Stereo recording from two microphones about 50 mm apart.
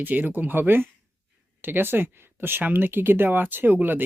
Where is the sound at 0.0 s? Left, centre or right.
Right.